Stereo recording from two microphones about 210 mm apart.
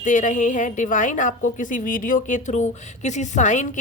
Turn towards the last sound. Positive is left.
turn(degrees=35)  # may be behind; listen again after turning